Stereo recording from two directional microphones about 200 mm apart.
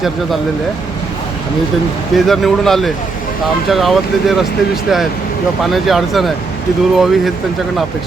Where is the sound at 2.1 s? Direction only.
Centre (ahead or behind).